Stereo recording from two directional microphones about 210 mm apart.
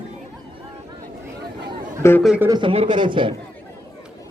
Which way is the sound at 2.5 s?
20° right (ahead or behind).